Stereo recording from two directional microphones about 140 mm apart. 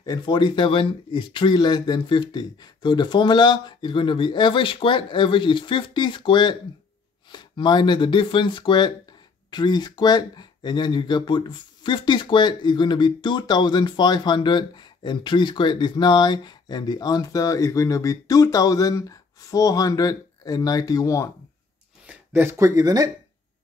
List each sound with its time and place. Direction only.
0.0 s speech: 30° left (ahead or behind)
22.0 s speech: 15° right (ahead or behind)